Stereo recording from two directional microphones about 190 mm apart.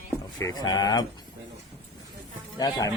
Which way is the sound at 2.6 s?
20° left (ahead or behind).